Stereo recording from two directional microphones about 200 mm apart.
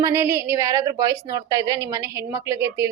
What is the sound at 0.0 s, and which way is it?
A woman's voice, 15° right (ahead or behind).